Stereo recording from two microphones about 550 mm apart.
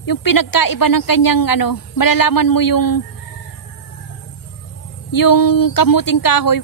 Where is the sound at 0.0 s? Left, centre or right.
Left.